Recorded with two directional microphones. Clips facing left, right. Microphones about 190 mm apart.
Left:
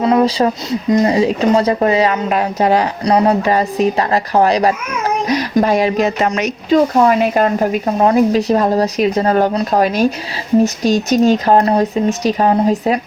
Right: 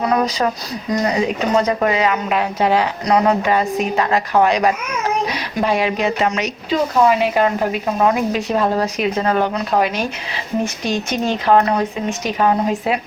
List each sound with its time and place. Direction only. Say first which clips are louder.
0.0 s speech: left 5 dB; 25° left (ahead or behind)